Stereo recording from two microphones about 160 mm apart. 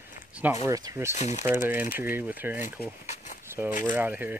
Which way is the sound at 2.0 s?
10° right (ahead or behind).